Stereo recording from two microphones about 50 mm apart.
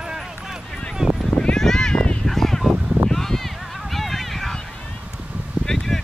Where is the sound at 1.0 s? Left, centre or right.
Centre.